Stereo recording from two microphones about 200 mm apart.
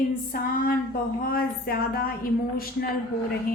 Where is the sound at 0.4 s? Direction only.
45° left (ahead or behind).